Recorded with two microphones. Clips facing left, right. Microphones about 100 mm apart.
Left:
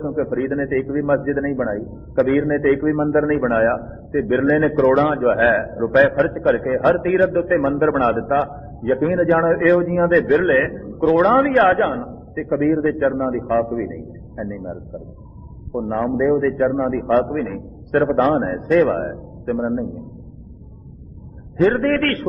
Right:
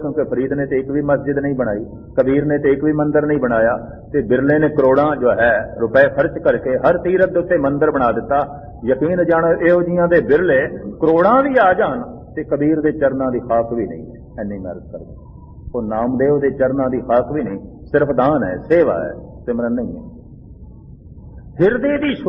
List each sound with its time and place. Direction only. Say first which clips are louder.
0.0 s a man's voice: right 3 dB; centre (ahead or behind)
9.4 s speech: right 2 dB; centre (ahead or behind)
10.2 s a man's voice: right 3 dB; 20° right (ahead or behind)
10.4 s a man's voice: right 2 dB; centre (ahead or behind)
14.3 s a man's voice: right 3 dB; centre (ahead or behind)
21.8 s speech: right 2 dB; centre (ahead or behind)